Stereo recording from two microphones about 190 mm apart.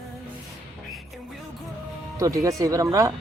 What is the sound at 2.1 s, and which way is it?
Speech, 15° right (ahead or behind).